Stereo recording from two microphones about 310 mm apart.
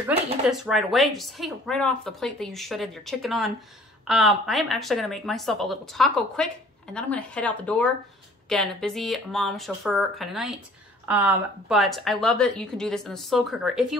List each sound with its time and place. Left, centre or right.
0.0 s speech: centre